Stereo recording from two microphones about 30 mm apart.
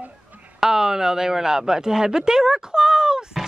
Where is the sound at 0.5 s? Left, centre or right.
Centre.